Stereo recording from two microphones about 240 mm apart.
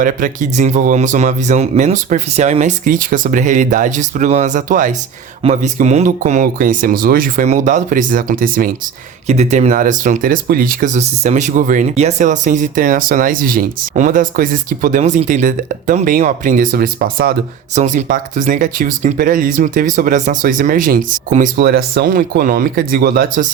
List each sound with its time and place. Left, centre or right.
0.0 s speech: right